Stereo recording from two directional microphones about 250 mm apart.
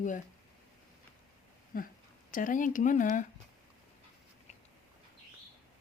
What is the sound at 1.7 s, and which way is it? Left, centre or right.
Speech, left.